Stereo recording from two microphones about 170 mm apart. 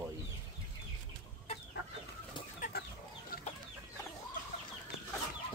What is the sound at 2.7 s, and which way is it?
Chicken, 65° left (ahead or behind).